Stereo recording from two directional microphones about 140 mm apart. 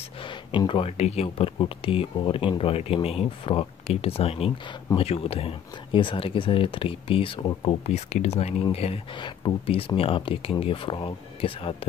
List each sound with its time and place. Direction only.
0.2 s speech: 35° left (ahead or behind)